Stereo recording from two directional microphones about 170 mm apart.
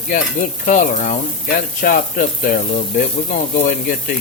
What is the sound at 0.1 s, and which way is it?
Stir, 50° left (ahead or behind).